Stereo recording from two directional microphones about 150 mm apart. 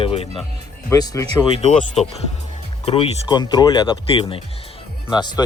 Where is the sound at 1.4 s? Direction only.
40° left (ahead or behind).